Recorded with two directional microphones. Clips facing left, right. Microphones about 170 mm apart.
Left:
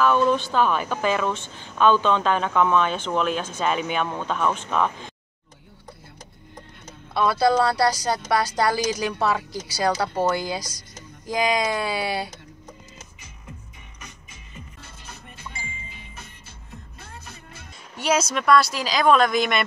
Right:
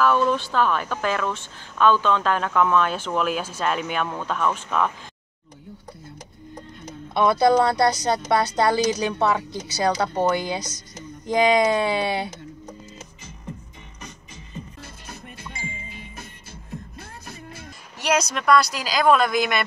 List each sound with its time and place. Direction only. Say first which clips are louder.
0.0 s speech: left 1 dB; centre (ahead or behind)
7.2 s a woman's voice: right 2 dB; 20° right (ahead or behind)
17.9 s speech: even; centre (ahead or behind)